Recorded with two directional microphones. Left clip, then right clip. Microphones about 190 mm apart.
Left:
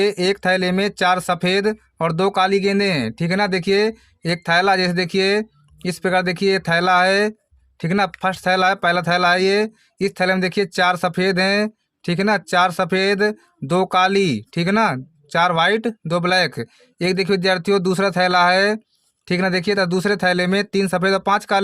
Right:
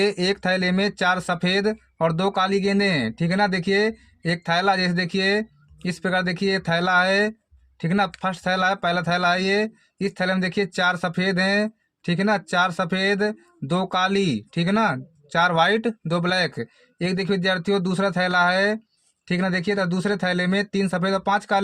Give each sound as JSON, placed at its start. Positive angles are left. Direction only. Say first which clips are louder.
{"t": 0.0, "sound": "speech", "louder": "left 4 dB", "side_deg": 25}